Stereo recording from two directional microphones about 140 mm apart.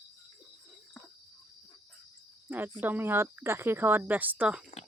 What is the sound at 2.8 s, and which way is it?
Speech, 15° right (ahead or behind).